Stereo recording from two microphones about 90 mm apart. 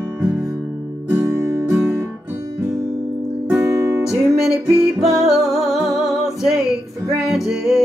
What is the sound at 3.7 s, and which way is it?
Music, 30° right (ahead or behind).